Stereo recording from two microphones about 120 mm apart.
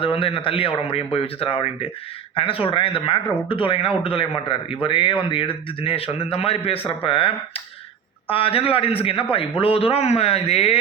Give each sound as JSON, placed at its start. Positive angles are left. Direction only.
{"t": 0.0, "sound": "a man's voice", "side_deg": 50}